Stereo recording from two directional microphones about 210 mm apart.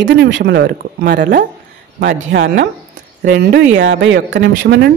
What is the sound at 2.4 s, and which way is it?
Speech, 40° right (ahead or behind).